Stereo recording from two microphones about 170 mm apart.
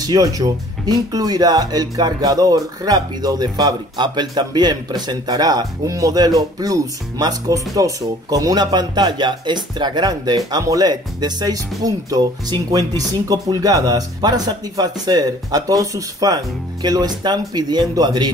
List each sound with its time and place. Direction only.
0.0 s speech: 20° right (ahead or behind)